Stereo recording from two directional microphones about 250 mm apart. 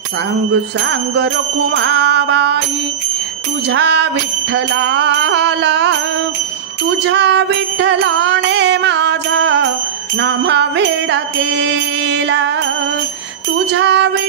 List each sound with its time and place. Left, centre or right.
1.1 s music: right
3.7 s music: right
7.0 s music: right
13.7 s music: right